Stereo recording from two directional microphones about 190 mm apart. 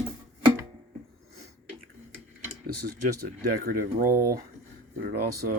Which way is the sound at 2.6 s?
50° right (ahead or behind).